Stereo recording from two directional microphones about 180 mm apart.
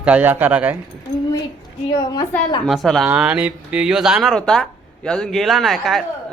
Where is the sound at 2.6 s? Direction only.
Centre (ahead or behind).